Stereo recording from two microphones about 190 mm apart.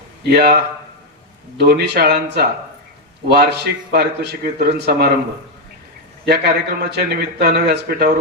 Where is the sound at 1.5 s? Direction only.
60° right (ahead or behind).